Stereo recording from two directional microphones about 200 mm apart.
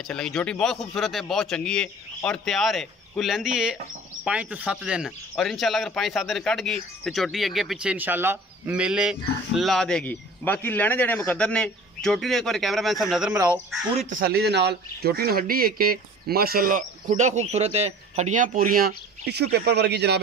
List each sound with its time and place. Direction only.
0.0 s speech: 5° left (ahead or behind)
14.0 s a man's voice: 50° right (ahead or behind)